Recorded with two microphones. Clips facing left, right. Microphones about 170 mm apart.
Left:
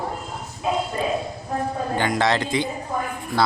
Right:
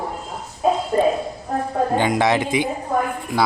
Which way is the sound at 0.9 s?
30° right (ahead or behind).